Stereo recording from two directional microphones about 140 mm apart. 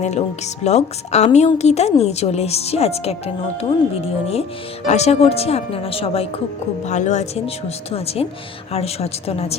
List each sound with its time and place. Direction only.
0.0 s a woman's voice: 50° left (ahead or behind)
6.8 s a woman's voice: 55° left (ahead or behind)